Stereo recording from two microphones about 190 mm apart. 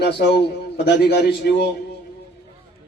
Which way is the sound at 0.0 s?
60° left (ahead or behind).